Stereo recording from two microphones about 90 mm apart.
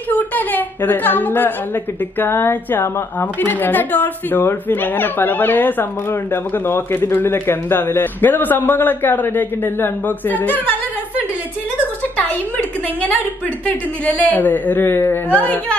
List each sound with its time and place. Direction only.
0.1 s a sound: 20° left (ahead or behind)
2.1 s a woman's voice: 25° left (ahead or behind)
12.2 s a woman's voice: 15° left (ahead or behind)